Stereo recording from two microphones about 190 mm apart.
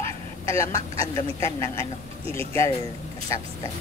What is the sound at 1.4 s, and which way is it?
Speech, 15° left (ahead or behind).